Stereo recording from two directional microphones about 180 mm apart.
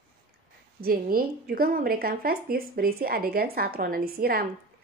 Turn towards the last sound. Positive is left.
turn(degrees=-55)  # may be behind; listen again after turning